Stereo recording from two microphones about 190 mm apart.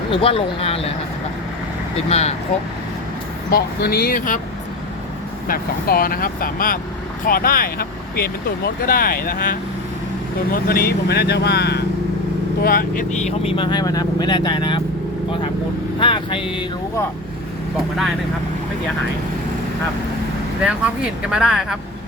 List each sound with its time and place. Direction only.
0.1 s speech: 30° left (ahead or behind)
2.0 s speech: 35° left (ahead or behind)
3.5 s speech: 55° left (ahead or behind)
5.5 s speech: 50° left (ahead or behind)
12.6 s speech: 50° left (ahead or behind)
13.5 s speech: 25° left (ahead or behind)
16.0 s speech: 25° left (ahead or behind)
20.6 s speech: 5° right (ahead or behind)